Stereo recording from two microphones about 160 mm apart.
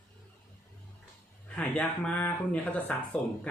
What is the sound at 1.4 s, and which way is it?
Speech, 10° left (ahead or behind).